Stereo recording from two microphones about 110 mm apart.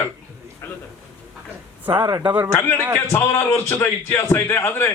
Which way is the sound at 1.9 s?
45° right (ahead or behind).